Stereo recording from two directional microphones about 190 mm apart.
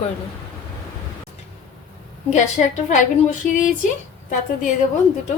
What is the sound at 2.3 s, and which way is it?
A woman's voice, 40° left (ahead or behind).